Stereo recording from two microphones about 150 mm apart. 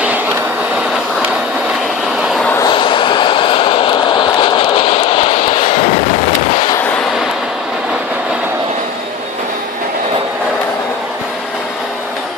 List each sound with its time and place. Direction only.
2.6 s vehicle: 35° left (ahead or behind)